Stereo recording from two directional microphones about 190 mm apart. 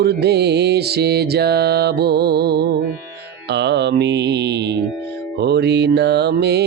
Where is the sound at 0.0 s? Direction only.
60° right (ahead or behind).